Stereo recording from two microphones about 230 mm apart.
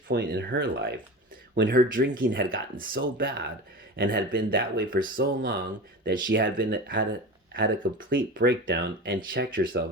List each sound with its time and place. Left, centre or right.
0.1 s speech: right